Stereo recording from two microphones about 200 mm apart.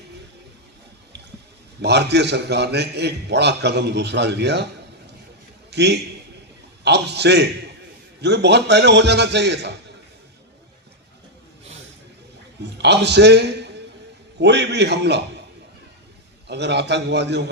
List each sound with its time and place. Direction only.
1.8 s a man's voice: 60° right (ahead or behind)
5.7 s a man's voice: 55° right (ahead or behind)
12.8 s a man's voice: 60° right (ahead or behind)
16.5 s a man's voice: 60° right (ahead or behind)